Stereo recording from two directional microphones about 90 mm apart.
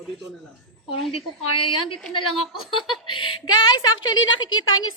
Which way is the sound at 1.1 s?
85° left.